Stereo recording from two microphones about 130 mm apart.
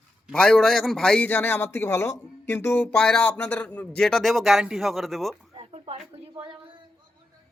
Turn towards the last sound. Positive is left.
turn(degrees=-50)  # may be behind; listen again after turning